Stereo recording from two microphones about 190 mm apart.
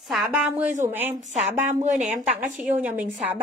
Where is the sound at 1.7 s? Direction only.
40° right (ahead or behind).